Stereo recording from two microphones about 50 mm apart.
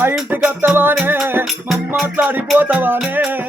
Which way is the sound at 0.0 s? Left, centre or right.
Right.